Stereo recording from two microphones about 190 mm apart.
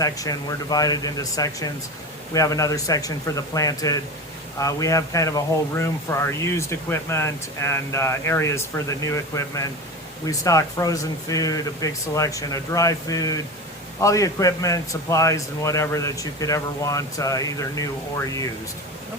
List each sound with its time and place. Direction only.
0.0 s a man's voice: 20° left (ahead or behind)